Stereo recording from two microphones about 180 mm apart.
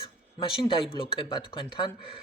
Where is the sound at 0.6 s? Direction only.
30° left (ahead or behind).